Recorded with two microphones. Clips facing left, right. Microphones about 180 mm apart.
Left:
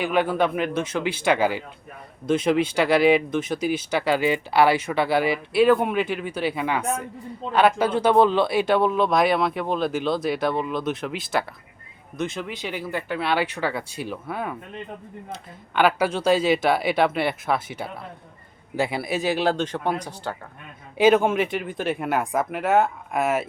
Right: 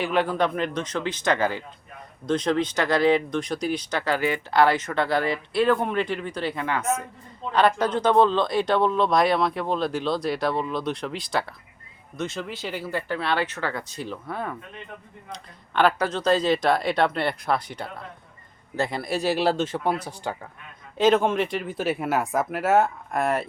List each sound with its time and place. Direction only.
0.0 s speech: 5° left (ahead or behind)
21.0 s speech: 5° left (ahead or behind)